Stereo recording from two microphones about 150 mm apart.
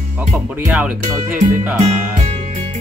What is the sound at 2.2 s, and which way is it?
Music, 45° right (ahead or behind).